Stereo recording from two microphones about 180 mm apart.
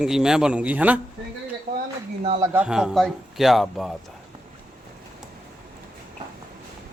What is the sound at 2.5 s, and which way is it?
A man's voice, 5° right (ahead or behind).